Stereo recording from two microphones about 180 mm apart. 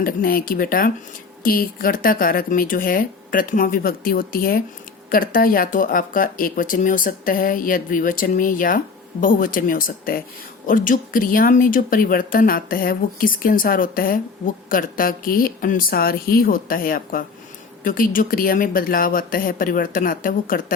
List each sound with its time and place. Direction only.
0.0 s speech: 50° left (ahead or behind)